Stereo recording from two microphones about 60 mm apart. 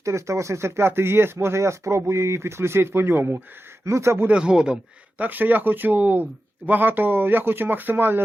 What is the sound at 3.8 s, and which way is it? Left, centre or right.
Speech, right.